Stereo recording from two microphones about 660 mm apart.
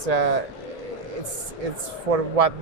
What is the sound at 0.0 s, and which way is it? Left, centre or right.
Speech, right.